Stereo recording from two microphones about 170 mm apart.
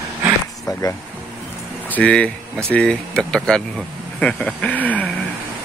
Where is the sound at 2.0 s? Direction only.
5° left (ahead or behind).